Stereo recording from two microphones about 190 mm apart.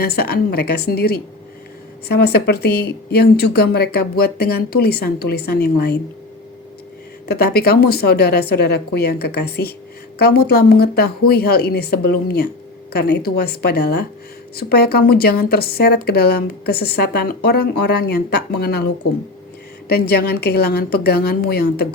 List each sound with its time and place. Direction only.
0.0 s speech: 55° left (ahead or behind)
7.3 s speech: 55° left (ahead or behind)
19.9 s speech: 55° left (ahead or behind)